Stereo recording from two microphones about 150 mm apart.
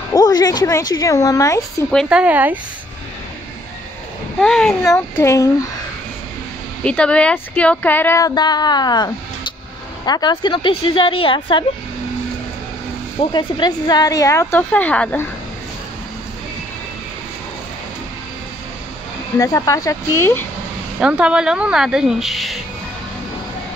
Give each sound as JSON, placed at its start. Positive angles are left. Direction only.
{"t": 0.1, "sound": "speech", "side_deg": 25}
{"t": 2.0, "sound": "speech", "side_deg": -10}
{"t": 4.4, "sound": "speech", "side_deg": 5}
{"t": 4.8, "sound": "speech", "side_deg": 20}
{"t": 6.8, "sound": "speech", "side_deg": 5}
{"t": 8.4, "sound": "a woman's voice", "side_deg": 30}
{"t": 13.3, "sound": "speech", "side_deg": 30}
{"t": 19.3, "sound": "speech", "side_deg": 20}
{"t": 21.0, "sound": "speech", "side_deg": -5}